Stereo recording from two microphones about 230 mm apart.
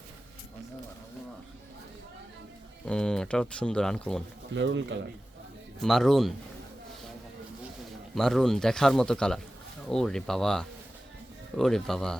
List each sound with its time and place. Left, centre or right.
2.8 s speech: centre
4.5 s speech: right
5.8 s speech: centre
8.1 s speech: centre